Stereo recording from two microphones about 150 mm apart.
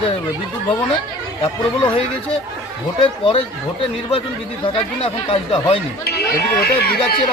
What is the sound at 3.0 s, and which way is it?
Speech, 35° left (ahead or behind).